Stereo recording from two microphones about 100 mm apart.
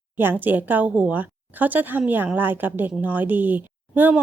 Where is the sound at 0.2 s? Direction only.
20° right (ahead or behind).